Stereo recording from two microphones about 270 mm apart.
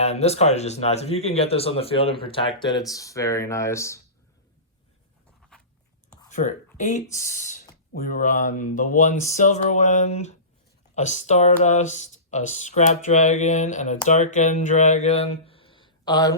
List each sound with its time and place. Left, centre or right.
0.0 s speech: left
5.5 s a sound: centre
6.3 s speech: left